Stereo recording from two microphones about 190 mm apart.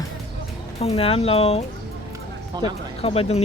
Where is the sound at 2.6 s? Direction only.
30° left (ahead or behind).